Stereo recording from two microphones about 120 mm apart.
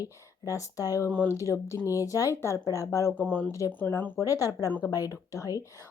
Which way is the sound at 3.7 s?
15° left (ahead or behind).